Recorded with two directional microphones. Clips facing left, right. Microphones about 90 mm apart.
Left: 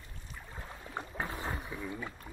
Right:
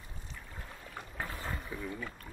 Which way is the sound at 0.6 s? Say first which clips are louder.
Left 5 dB; 25° left (ahead or behind).